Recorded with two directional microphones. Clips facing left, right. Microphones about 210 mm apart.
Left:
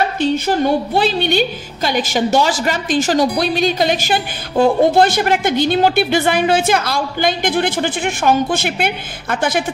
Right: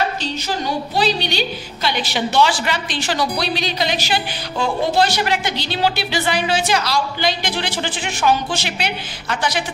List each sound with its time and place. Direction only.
0.2 s a woman's voice: 55° left (ahead or behind)